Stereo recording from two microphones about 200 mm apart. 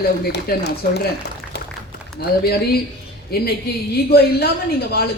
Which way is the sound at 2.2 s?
55° left (ahead or behind).